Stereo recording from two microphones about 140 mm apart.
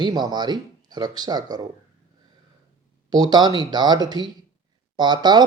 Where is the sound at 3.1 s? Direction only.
30° right (ahead or behind).